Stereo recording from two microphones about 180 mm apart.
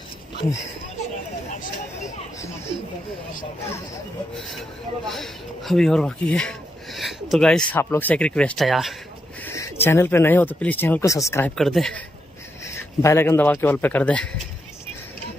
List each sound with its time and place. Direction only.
1.5 s a sound: 45° left (ahead or behind)
5.0 s speech: centre (ahead or behind)
9.4 s speech: 15° left (ahead or behind)
11.5 s speech: centre (ahead or behind)
12.6 s speech: 15° left (ahead or behind)